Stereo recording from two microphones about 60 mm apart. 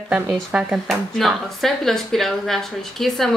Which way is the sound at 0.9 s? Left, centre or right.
Centre.